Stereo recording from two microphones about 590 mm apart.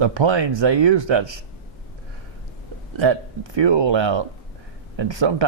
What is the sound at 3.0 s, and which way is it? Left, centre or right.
Speech, right.